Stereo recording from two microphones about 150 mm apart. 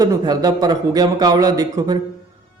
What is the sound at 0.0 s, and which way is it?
Speech, 25° right (ahead or behind).